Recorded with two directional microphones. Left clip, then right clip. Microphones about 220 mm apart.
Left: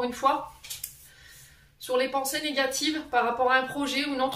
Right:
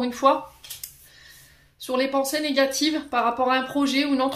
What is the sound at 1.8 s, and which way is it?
Speech, 45° right (ahead or behind).